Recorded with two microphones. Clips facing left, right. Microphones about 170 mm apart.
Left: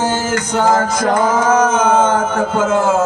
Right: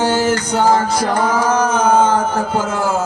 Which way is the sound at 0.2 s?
35° right (ahead or behind).